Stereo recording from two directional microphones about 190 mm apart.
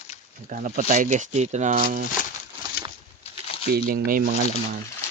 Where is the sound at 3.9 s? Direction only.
50° right (ahead or behind).